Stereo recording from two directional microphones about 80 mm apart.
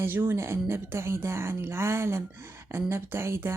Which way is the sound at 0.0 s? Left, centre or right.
Right.